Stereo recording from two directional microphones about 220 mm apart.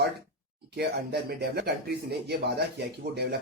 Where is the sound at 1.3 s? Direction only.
45° right (ahead or behind).